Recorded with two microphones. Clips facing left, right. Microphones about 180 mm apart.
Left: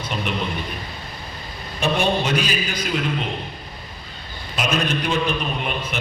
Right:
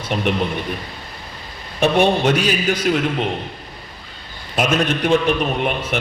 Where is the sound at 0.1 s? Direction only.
60° right (ahead or behind).